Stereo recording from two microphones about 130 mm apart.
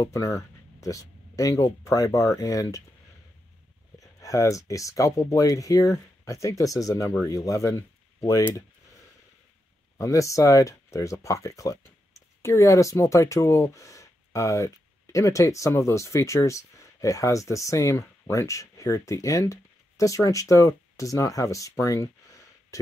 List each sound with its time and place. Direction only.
0.0 s speech: 25° left (ahead or behind)
4.0 s speech: 25° left (ahead or behind)
9.9 s speech: 25° left (ahead or behind)